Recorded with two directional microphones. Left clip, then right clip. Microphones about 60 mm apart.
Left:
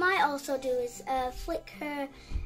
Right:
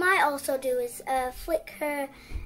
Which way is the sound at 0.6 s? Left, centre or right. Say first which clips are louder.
Right 3 dB; right.